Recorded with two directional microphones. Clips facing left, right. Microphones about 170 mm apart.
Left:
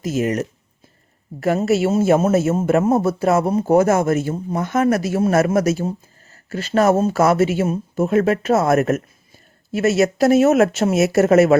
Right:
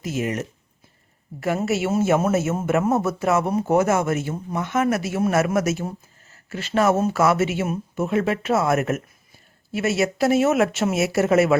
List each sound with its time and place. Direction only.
0.0 s a man's voice: 40° left (ahead or behind)
1.6 s a man's voice: 35° left (ahead or behind)